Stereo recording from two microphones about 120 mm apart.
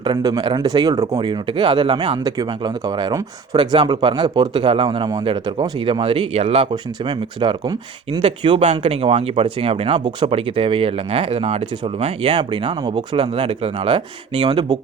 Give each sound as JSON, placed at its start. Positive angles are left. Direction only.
{"t": 0.0, "sound": "speech", "side_deg": -40}
{"t": 2.2, "sound": "speech", "side_deg": -35}
{"t": 8.2, "sound": "speech", "side_deg": -55}
{"t": 12.4, "sound": "speech", "side_deg": -40}